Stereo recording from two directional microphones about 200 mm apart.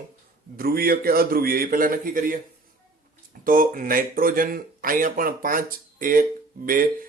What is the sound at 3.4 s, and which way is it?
Speech, 45° right (ahead or behind).